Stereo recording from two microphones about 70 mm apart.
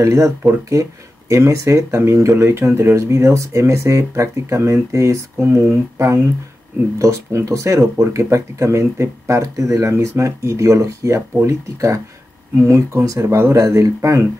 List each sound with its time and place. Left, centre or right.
0.0 s speech: right
0.4 s speech: right
1.3 s speech: right